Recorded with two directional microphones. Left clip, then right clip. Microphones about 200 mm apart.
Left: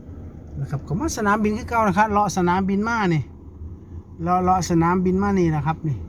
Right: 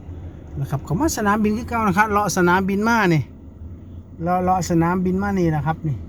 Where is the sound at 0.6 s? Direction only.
20° right (ahead or behind).